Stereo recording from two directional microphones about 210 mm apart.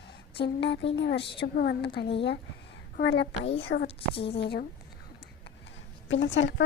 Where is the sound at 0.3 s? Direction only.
55° left (ahead or behind).